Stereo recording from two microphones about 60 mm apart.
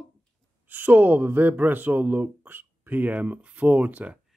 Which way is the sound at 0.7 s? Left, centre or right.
Right.